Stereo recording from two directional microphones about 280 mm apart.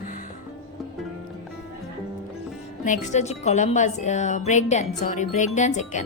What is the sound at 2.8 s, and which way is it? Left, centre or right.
Speech, left.